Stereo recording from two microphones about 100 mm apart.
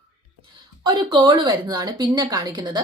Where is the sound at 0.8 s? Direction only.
50° right (ahead or behind).